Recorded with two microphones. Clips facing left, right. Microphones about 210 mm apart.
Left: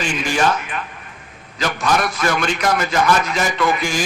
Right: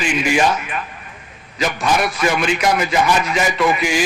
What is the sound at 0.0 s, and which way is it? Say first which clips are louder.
A man's voice: right 2 dB; 10° right (ahead or behind).